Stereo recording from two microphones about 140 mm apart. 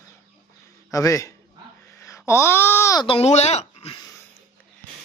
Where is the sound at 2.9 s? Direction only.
40° left (ahead or behind).